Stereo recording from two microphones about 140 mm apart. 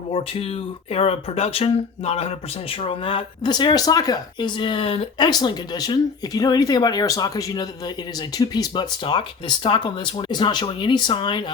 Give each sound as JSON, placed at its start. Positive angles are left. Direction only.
{"t": 0.1, "sound": "speech", "side_deg": 45}
{"t": 5.2, "sound": "speech", "side_deg": 30}